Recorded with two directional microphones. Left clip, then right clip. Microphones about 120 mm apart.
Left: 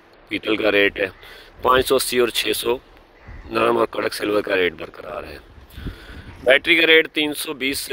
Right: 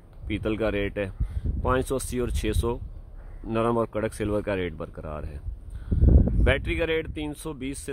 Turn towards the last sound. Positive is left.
turn(degrees=15)  # may be behind; listen again after turning